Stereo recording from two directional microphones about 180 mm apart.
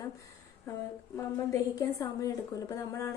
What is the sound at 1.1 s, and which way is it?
A woman's voice, 15° left (ahead or behind).